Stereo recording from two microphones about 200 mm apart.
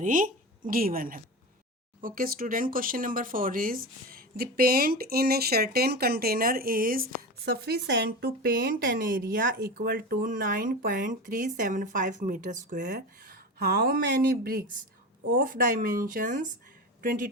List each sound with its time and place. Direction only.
0.0 s speech: 40° right (ahead or behind)